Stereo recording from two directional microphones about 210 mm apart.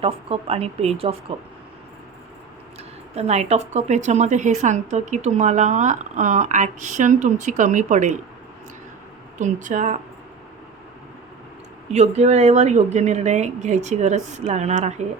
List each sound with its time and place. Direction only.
0.0 s speech: 30° right (ahead or behind)
3.2 s a woman's voice: 30° right (ahead or behind)
9.4 s a woman's voice: 35° right (ahead or behind)
11.9 s a woman's voice: 30° right (ahead or behind)